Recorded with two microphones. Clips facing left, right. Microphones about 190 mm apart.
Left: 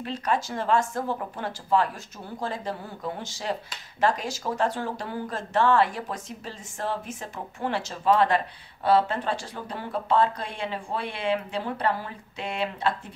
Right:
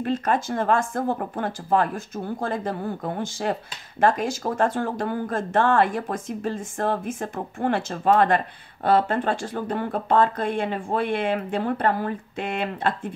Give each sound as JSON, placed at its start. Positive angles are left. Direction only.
{"t": 0.0, "sound": "speech", "side_deg": -50}